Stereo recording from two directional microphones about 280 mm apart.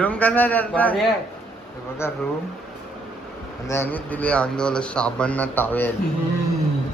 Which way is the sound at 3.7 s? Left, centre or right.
Centre.